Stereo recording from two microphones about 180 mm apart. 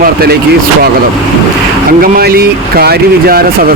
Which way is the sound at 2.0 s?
55° right (ahead or behind).